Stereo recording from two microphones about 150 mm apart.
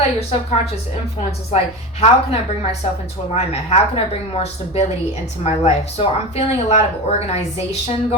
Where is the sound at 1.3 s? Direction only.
45° left (ahead or behind).